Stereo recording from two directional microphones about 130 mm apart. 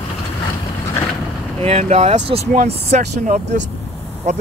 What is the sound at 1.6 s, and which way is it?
Speech, 55° right (ahead or behind).